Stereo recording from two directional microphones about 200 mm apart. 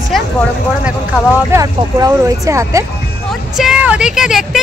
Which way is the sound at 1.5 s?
15° right (ahead or behind).